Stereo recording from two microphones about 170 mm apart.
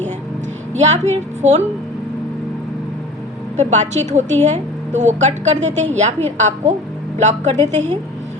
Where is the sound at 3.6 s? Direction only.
45° right (ahead or behind).